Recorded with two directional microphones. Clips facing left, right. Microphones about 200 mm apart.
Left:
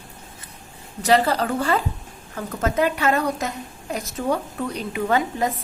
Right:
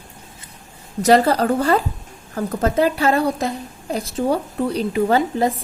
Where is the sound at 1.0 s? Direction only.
40° right (ahead or behind).